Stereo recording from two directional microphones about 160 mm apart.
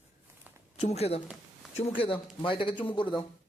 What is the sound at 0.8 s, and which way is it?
Speech, 40° left (ahead or behind).